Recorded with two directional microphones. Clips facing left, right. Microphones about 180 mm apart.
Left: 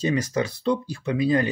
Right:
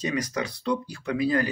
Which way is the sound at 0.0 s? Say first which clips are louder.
Left 4 dB; 30° left (ahead or behind).